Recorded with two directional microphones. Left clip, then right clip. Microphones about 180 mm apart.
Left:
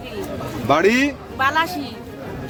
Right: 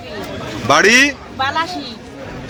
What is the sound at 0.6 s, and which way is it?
Speech, centre (ahead or behind).